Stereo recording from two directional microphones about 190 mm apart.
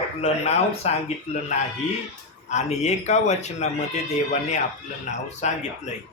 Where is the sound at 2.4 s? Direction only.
35° left (ahead or behind).